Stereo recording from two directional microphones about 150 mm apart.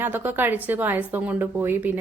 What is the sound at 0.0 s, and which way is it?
A woman's voice, 15° right (ahead or behind).